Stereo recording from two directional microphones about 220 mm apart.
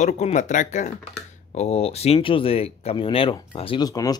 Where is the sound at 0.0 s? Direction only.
30° left (ahead or behind).